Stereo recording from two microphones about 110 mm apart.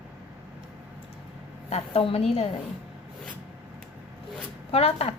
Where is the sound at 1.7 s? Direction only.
60° left (ahead or behind).